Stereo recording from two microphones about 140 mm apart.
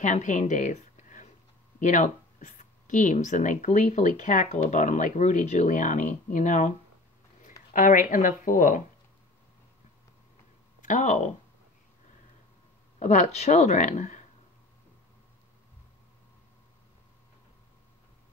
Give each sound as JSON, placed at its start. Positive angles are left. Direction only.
{"t": 0.0, "sound": "a woman's voice", "side_deg": 60}
{"t": 7.7, "sound": "speech", "side_deg": 70}
{"t": 10.8, "sound": "speech", "side_deg": 60}
{"t": 13.0, "sound": "speech", "side_deg": 55}